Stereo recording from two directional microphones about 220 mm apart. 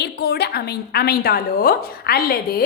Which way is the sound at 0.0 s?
45° left (ahead or behind).